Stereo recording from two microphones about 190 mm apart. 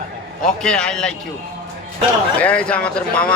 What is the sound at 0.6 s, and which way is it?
Speech, 5° left (ahead or behind).